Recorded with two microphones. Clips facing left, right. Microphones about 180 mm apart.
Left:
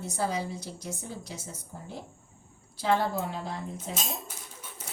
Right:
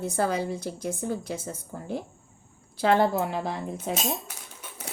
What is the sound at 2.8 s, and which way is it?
Speech, 70° right (ahead or behind).